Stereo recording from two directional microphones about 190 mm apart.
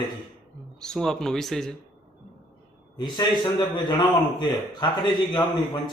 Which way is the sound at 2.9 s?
25° left (ahead or behind).